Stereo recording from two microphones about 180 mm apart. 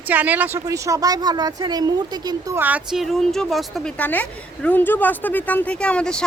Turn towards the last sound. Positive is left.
turn(degrees=5)  # may be behind; listen again after turning